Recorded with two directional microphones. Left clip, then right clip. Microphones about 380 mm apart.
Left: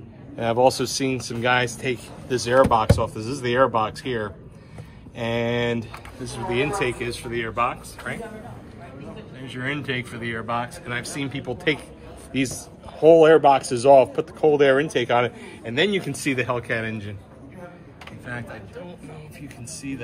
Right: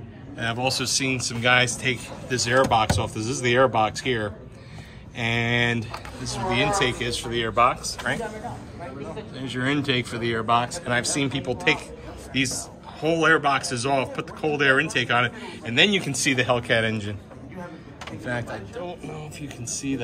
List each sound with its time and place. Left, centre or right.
0.4 s speech: centre
9.6 s speech: centre
18.2 s speech: centre
19.4 s speech: right